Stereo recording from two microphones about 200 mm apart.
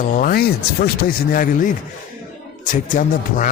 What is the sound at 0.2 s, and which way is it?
Speech, 50° left (ahead or behind).